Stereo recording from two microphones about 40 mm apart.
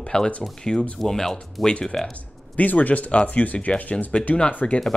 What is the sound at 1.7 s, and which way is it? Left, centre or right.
Speech, left.